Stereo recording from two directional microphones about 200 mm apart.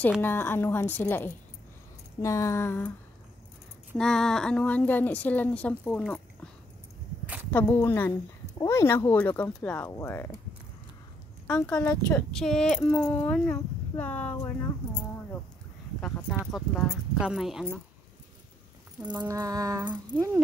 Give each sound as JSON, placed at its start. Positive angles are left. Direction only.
{"t": 0.2, "sound": "speech", "side_deg": 10}
{"t": 3.9, "sound": "speech", "side_deg": 0}
{"t": 7.5, "sound": "speech", "side_deg": 10}
{"t": 11.4, "sound": "speech", "side_deg": 10}
{"t": 16.5, "sound": "speech", "side_deg": 0}
{"t": 18.9, "sound": "a sound", "side_deg": -5}